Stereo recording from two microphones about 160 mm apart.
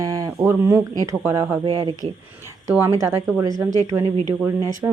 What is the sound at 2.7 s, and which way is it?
A woman's voice, 15° right (ahead or behind).